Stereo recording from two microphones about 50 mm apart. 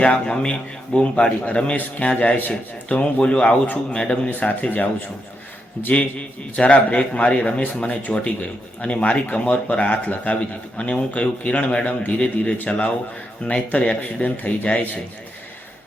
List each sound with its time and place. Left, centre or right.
0.0 s a man's voice: left
4.3 s a man's voice: left
5.9 s a man's voice: left